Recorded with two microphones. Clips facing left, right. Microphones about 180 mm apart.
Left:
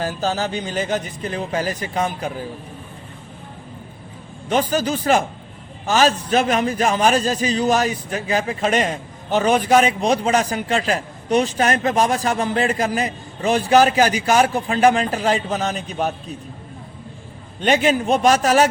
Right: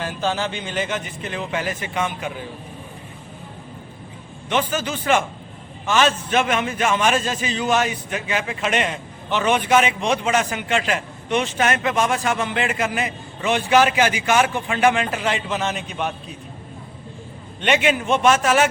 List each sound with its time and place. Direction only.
0.0 s a man's voice: 40° left (ahead or behind)
4.4 s a man's voice: 40° left (ahead or behind)
17.6 s a man's voice: 40° left (ahead or behind)